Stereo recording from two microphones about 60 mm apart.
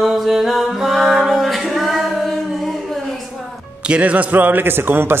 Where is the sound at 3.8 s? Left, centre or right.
Right.